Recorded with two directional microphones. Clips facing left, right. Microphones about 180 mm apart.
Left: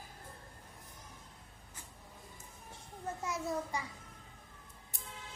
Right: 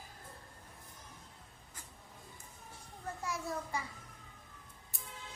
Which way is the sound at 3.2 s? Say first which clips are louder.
Left 2 dB; 20° left (ahead or behind).